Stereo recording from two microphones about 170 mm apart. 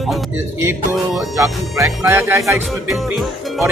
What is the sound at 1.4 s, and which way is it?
Speech, 20° right (ahead or behind).